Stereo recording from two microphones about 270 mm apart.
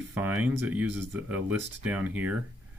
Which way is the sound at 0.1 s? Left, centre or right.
Centre.